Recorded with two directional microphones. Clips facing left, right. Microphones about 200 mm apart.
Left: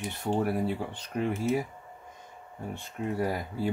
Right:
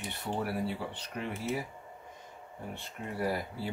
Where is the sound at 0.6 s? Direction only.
45° left (ahead or behind).